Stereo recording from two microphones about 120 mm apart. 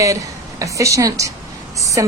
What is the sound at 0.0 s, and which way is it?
A woman's voice, 25° right (ahead or behind).